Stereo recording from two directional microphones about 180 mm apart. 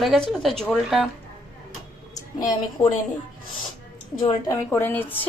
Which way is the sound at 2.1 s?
20° left (ahead or behind).